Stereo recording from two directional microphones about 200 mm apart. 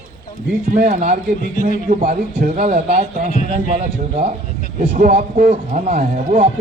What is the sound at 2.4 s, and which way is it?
Speech, 45° right (ahead or behind).